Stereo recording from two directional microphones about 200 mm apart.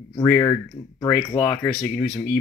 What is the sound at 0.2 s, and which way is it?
Speech, 15° left (ahead or behind).